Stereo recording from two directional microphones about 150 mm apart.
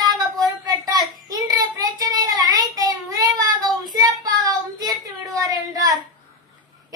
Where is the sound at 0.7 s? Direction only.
25° right (ahead or behind).